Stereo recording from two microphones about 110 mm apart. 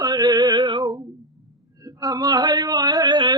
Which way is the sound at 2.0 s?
35° right (ahead or behind).